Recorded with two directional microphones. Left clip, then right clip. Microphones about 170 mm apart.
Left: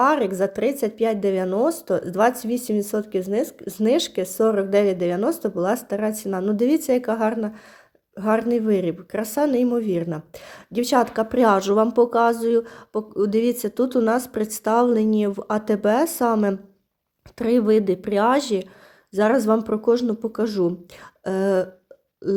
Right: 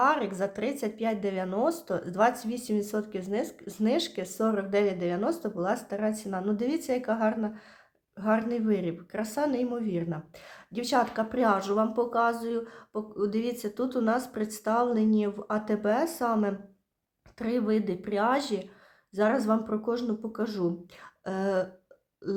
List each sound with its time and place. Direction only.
0.0 s a woman's voice: 40° left (ahead or behind)